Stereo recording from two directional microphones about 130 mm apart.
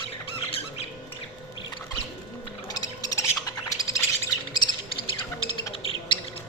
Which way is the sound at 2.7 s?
30° left (ahead or behind).